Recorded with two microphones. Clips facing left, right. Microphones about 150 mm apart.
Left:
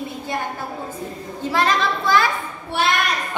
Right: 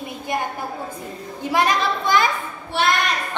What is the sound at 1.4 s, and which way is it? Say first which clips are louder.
Speech: even; 15° right (ahead or behind).